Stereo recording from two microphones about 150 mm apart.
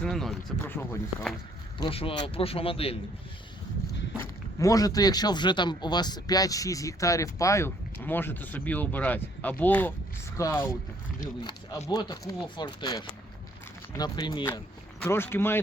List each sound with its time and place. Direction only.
0.0 s a sound: centre (ahead or behind)
0.6 s speech: 10° left (ahead or behind)
1.8 s speech: 40° left (ahead or behind)
4.2 s speech: 20° left (ahead or behind)
11.9 s speech: 25° left (ahead or behind)
15.0 s speech: 15° left (ahead or behind)